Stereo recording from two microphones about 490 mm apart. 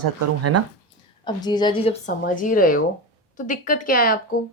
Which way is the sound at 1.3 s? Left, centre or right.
Centre.